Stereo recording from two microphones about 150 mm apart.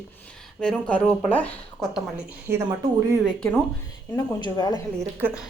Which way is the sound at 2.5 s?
15° right (ahead or behind).